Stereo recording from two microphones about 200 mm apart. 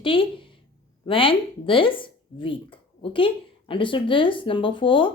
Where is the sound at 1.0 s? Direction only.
25° left (ahead or behind).